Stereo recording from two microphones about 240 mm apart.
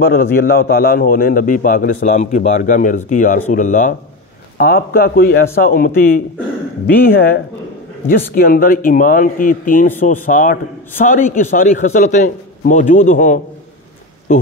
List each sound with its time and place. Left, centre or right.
0.0 s a man's voice: left